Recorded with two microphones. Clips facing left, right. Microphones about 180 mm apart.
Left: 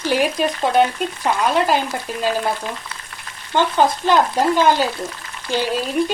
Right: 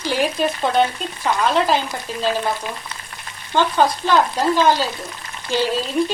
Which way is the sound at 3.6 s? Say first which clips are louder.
Even; 15° left (ahead or behind).